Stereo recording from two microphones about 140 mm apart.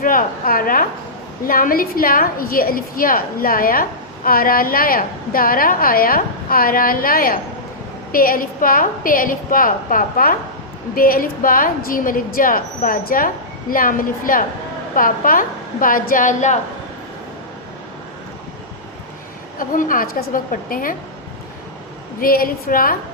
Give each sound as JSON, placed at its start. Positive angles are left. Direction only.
{"t": 0.0, "sound": "a woman's voice", "side_deg": 85}
{"t": 19.5, "sound": "a woman's voice", "side_deg": 75}
{"t": 22.2, "sound": "a woman's voice", "side_deg": 90}